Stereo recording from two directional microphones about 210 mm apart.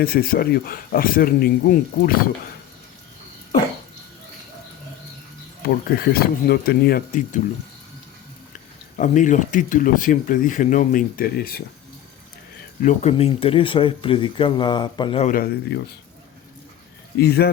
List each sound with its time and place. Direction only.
0.0 s speech: 45° left (ahead or behind)
5.6 s speech: 50° left (ahead or behind)
8.5 s speech: 35° left (ahead or behind)
12.8 s speech: 35° left (ahead or behind)
15.3 s speech: 45° left (ahead or behind)
17.2 s speech: 50° left (ahead or behind)